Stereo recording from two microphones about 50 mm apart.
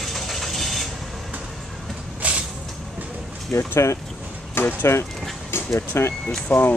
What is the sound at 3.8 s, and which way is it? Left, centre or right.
Speech, left.